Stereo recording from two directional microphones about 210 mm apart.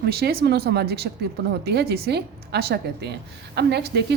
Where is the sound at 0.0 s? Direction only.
50° right (ahead or behind).